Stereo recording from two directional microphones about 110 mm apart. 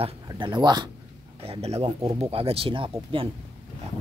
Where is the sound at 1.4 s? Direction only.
65° right (ahead or behind).